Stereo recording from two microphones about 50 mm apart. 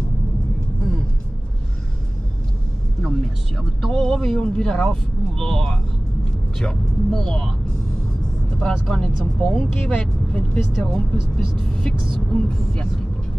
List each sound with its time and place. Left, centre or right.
3.0 s speech: centre
4.5 s speech: centre
8.5 s speech: centre
9.8 s speech: centre